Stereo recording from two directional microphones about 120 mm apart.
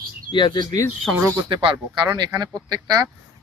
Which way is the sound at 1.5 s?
45° right (ahead or behind).